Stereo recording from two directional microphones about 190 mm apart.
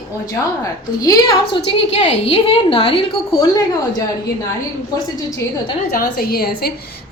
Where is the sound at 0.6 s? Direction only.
20° left (ahead or behind).